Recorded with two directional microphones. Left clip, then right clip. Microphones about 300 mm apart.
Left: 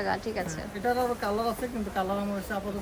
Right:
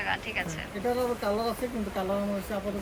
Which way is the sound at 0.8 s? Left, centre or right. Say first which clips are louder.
Left 1 dB; centre.